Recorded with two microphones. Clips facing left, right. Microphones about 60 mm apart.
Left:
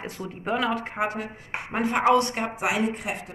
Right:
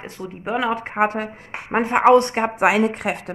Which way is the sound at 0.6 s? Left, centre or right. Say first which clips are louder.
Right 5 dB; right.